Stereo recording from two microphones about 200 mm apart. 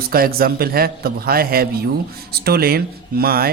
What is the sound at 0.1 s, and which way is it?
Speech, 50° right (ahead or behind).